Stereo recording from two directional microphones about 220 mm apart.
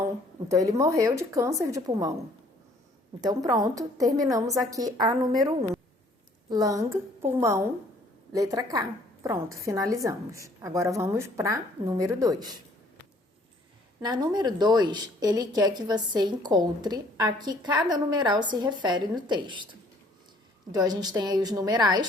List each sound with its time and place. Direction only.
0.4 s a woman's voice: 15° right (ahead or behind)
3.2 s a woman's voice: 15° right (ahead or behind)
6.5 s a woman's voice: 15° right (ahead or behind)
14.0 s a woman's voice: 20° right (ahead or behind)
20.7 s a woman's voice: 15° right (ahead or behind)